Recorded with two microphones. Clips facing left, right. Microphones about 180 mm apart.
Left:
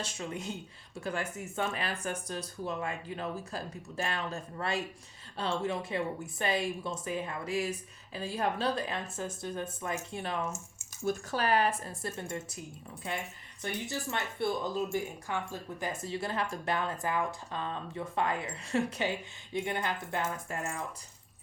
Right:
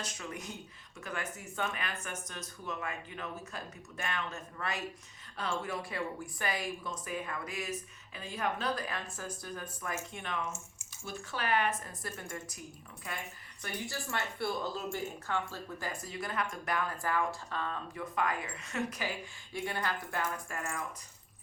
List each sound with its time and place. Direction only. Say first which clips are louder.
0.0 s speech: left 4 dB; 25° left (ahead or behind)